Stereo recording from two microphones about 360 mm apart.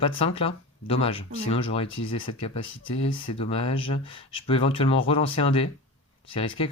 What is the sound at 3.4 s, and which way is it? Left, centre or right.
Speech, centre.